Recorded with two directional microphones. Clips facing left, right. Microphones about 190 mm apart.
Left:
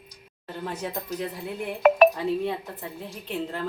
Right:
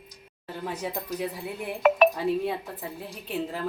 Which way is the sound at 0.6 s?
5° right (ahead or behind).